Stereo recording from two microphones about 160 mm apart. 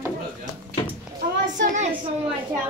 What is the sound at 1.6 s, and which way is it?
Speech, 50° right (ahead or behind).